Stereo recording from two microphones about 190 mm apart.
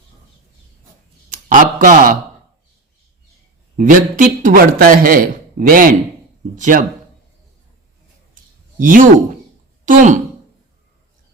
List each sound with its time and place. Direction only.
1.3 s a sound: 45° right (ahead or behind)
3.8 s a man's voice: 45° right (ahead or behind)
8.8 s a man's voice: 45° right (ahead or behind)